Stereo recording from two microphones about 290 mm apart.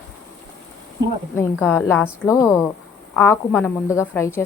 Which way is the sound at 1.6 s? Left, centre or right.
Centre.